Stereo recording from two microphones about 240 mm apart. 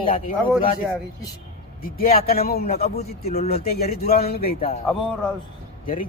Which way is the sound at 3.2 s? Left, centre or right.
Left.